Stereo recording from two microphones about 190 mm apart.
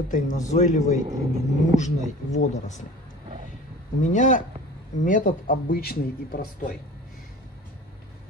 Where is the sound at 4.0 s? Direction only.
40° left (ahead or behind).